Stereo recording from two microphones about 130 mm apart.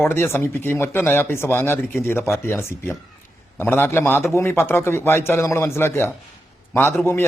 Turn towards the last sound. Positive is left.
turn(degrees=15)  # may be behind; listen again after turning